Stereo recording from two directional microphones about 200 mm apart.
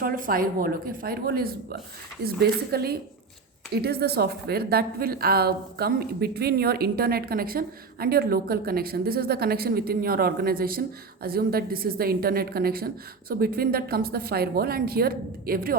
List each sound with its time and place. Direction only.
0.0 s a woman's voice: 45° right (ahead or behind)